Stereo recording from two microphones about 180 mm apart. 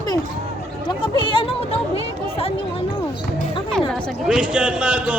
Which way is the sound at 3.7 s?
5° left (ahead or behind).